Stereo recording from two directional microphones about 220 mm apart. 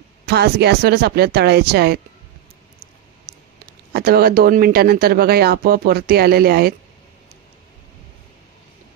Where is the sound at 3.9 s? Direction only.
45° right (ahead or behind).